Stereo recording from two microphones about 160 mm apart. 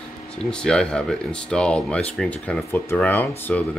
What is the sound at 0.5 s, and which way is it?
Speech, 5° left (ahead or behind).